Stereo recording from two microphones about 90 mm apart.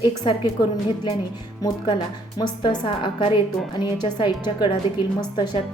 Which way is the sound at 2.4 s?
50° left (ahead or behind).